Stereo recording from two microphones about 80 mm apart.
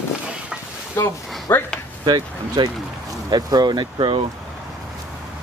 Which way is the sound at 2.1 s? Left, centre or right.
Right.